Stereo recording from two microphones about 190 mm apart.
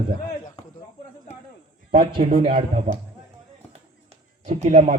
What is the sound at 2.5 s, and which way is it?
Speech, 40° right (ahead or behind).